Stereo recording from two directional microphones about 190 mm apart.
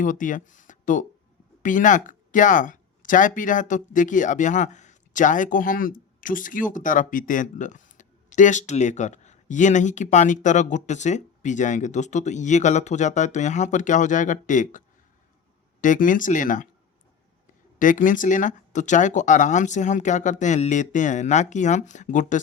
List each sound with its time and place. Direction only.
0.0 s speech: 45° left (ahead or behind)
17.7 s speech: 45° left (ahead or behind)